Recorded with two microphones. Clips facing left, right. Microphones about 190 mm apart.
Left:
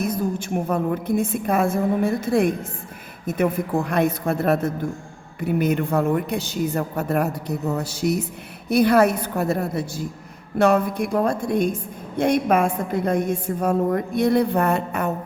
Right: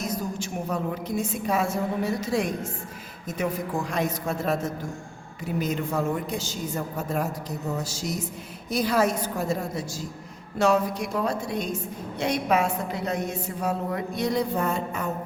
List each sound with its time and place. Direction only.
0.0 s a woman's voice: 55° left (ahead or behind)